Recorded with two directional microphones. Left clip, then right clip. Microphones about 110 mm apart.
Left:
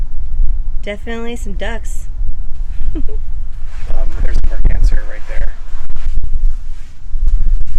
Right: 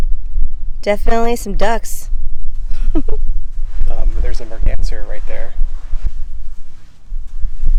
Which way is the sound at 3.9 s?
30° right (ahead or behind).